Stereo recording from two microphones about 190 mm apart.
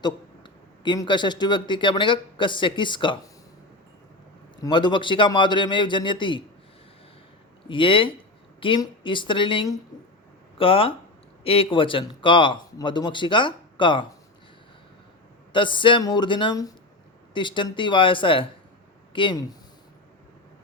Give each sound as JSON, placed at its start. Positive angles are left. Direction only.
{"t": 0.0, "sound": "a man's voice", "side_deg": 25}
{"t": 4.6, "sound": "speech", "side_deg": 25}
{"t": 7.7, "sound": "speech", "side_deg": 25}
{"t": 15.5, "sound": "speech", "side_deg": 25}